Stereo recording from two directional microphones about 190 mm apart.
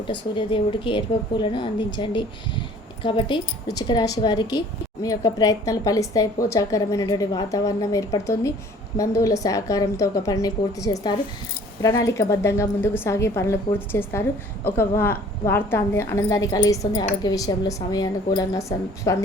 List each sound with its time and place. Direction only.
0.1 s a woman's voice: 25° left (ahead or behind)